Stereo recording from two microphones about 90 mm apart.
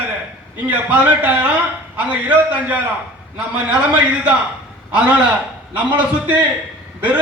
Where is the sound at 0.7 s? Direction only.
15° right (ahead or behind).